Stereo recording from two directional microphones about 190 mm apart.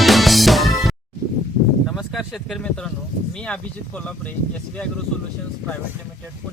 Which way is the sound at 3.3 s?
5° left (ahead or behind).